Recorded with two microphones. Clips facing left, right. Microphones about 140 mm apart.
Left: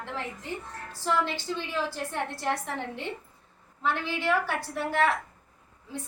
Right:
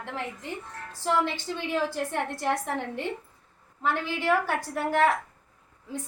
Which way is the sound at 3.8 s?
45° right (ahead or behind).